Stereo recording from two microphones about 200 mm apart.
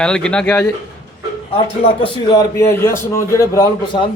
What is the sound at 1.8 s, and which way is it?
A man's voice, 25° left (ahead or behind).